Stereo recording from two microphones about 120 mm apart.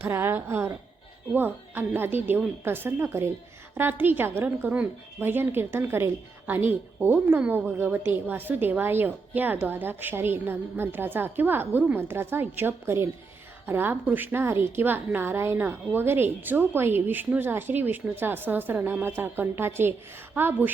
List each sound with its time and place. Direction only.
0.0 s a woman's voice: 20° right (ahead or behind)